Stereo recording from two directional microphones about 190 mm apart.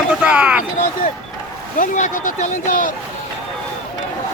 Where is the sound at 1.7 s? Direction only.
40° left (ahead or behind).